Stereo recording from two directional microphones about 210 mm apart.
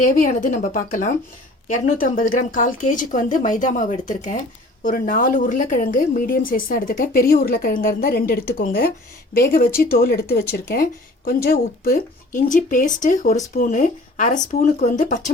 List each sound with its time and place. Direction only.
0.0 s a woman's voice: 40° left (ahead or behind)